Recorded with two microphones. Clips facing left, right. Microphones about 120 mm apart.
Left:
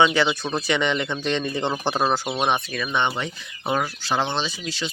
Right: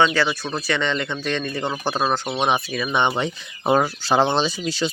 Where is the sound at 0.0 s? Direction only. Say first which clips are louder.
Even; 20° left (ahead or behind).